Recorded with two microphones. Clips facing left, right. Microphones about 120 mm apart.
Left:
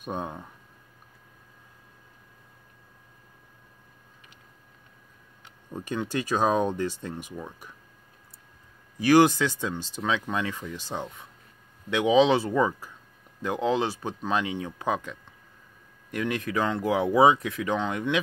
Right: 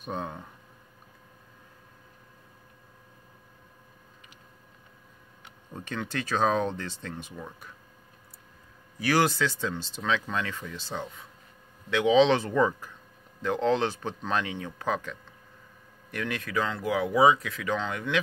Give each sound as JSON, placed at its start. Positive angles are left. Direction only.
{"t": 0.0, "sound": "speech", "side_deg": 15}
{"t": 5.7, "sound": "speech", "side_deg": 15}
{"t": 9.0, "sound": "speech", "side_deg": 20}